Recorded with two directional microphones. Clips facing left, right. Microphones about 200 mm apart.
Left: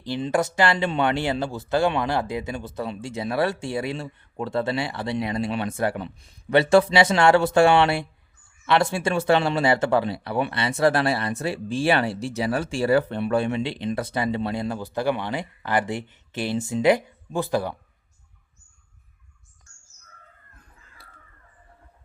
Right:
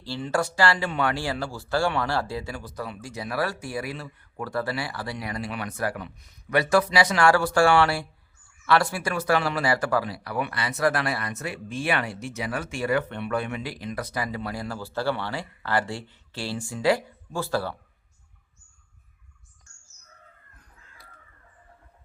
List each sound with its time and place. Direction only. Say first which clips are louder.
0.0 s speech: left 3 dB; 20° left (ahead or behind)